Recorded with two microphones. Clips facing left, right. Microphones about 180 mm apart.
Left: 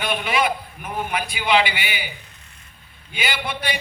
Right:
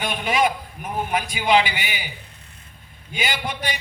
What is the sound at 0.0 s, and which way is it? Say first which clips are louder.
A man's voice: right 1 dB; 45° right (ahead or behind).